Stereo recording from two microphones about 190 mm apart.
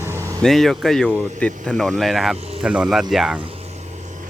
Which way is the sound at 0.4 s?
Centre (ahead or behind).